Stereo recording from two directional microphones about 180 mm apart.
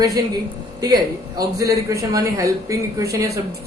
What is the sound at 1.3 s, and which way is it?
Speech, 20° right (ahead or behind).